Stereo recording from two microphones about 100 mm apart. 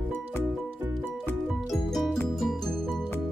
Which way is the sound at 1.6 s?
Centre (ahead or behind).